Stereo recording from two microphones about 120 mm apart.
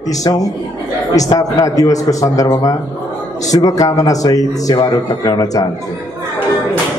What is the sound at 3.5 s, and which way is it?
A man's voice, 30° left (ahead or behind).